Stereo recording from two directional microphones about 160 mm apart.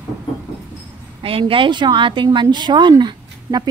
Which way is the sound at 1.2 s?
35° right (ahead or behind).